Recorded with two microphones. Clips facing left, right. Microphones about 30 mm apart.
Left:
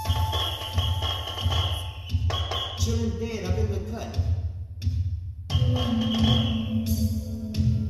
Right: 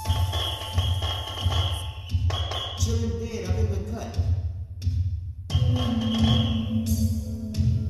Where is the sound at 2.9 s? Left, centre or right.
Centre.